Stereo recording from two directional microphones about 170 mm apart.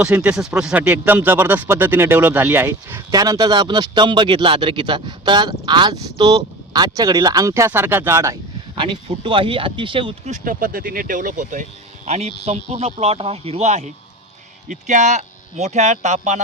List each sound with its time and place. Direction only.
0.0 s speech: 5° right (ahead or behind)
8.8 s speech: 30° right (ahead or behind)
10.3 s speech: 50° right (ahead or behind)
12.0 s speech: 40° right (ahead or behind)